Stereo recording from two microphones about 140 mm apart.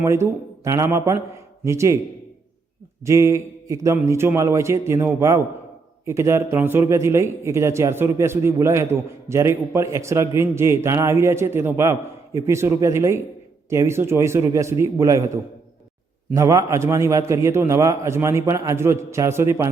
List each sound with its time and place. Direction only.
0.0 s a man's voice: 20° right (ahead or behind)
3.0 s a man's voice: 20° right (ahead or behind)